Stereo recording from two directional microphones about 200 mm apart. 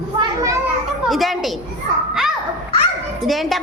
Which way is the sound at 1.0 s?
Centre (ahead or behind).